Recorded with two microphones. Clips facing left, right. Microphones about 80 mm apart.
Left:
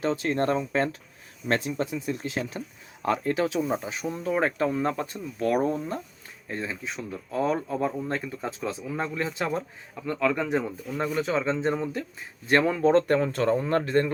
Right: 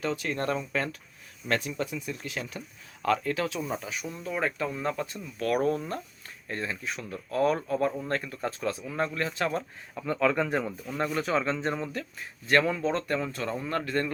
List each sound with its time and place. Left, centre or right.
0.0 s speech: left
5.5 s speech: centre
11.3 s speech: centre
12.8 s speech: left